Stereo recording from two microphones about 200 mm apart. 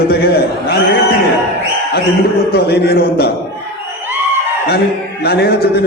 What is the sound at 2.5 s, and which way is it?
Speech, 55° left (ahead or behind).